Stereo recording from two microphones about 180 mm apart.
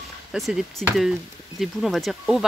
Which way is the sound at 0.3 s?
Centre (ahead or behind).